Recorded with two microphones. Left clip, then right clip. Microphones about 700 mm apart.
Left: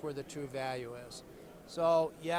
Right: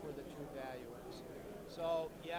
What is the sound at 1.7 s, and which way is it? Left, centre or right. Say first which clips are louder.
Speech: left 10 dB; left.